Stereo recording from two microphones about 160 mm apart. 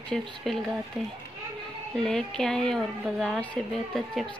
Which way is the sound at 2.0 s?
5° left (ahead or behind).